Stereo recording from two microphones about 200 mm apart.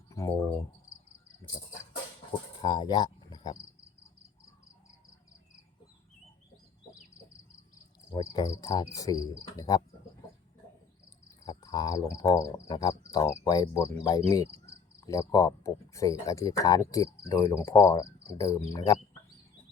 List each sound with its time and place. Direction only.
0.1 s cricket: 15° left (ahead or behind)
2.6 s cricket: 20° left (ahead or behind)
8.1 s cricket: 20° left (ahead or behind)
11.4 s cricket: 20° left (ahead or behind)
12.1 s speech: 15° left (ahead or behind)